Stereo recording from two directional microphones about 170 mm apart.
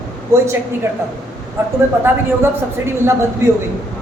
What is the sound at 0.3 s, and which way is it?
Speech, 15° right (ahead or behind).